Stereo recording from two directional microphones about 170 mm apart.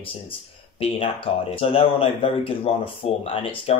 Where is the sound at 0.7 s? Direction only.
35° left (ahead or behind).